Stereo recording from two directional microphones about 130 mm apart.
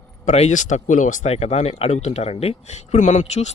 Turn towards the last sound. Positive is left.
turn(degrees=60)  # may be behind; listen again after turning